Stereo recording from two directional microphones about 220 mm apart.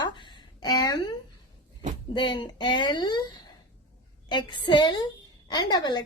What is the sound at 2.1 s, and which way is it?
A woman's voice, 20° left (ahead or behind).